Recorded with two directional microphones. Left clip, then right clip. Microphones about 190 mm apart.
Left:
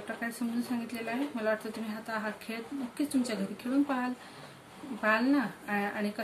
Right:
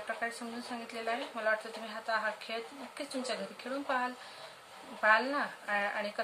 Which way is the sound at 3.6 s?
25° right (ahead or behind).